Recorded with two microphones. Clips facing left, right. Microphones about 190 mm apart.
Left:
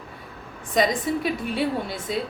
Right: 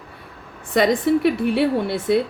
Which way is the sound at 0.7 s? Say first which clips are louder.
Right 5 dB; 65° right (ahead or behind).